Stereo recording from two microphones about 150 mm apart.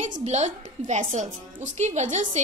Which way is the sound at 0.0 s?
50° right (ahead or behind).